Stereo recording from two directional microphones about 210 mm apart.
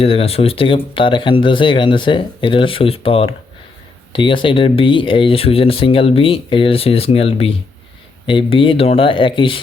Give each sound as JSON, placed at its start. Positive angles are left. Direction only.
{"t": 0.0, "sound": "speech", "side_deg": 30}